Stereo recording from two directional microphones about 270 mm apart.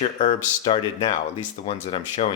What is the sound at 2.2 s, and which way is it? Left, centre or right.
Speech, left.